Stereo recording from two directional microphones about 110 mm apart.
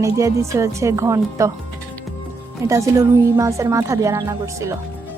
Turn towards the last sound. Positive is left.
turn(degrees=-25)  # may be behind; listen again after turning